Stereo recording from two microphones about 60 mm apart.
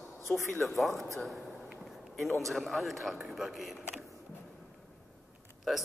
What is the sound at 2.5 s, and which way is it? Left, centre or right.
A man's voice, centre.